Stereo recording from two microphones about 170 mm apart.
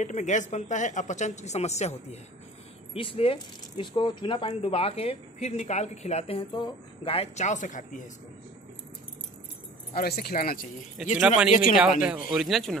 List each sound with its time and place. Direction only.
0.0 s a woman's voice: 45° left (ahead or behind)
9.9 s speech: 65° left (ahead or behind)
11.1 s speech: 5° right (ahead or behind)